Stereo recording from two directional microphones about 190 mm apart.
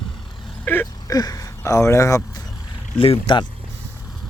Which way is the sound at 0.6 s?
10° left (ahead or behind).